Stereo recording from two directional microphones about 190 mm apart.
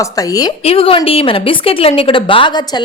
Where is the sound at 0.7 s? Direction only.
30° left (ahead or behind).